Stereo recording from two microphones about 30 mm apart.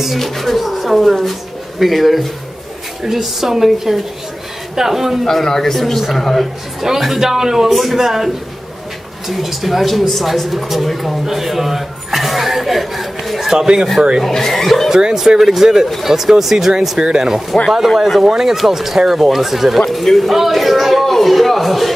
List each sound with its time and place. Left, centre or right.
0.2 s speech: centre
5.2 s a man's voice: centre
6.8 s speech: centre
7.7 s speech: centre
9.3 s speech: centre
13.5 s speech: right
14.2 s a man's voice: centre
14.9 s speech: right
15.1 s speech: centre
17.0 s speech: right
18.0 s speech: centre